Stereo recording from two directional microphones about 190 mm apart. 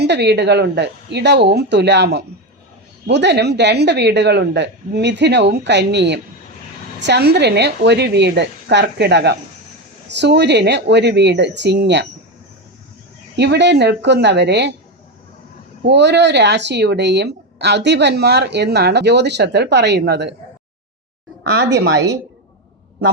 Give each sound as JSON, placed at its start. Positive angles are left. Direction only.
{"t": 0.0, "sound": "speech", "side_deg": -65}
{"t": 13.3, "sound": "speech", "side_deg": -60}
{"t": 15.8, "sound": "speech", "side_deg": -65}
{"t": 21.6, "sound": "a woman's voice", "side_deg": -65}